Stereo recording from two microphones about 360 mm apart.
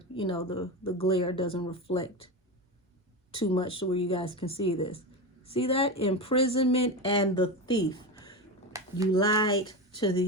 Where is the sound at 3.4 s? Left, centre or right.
Centre.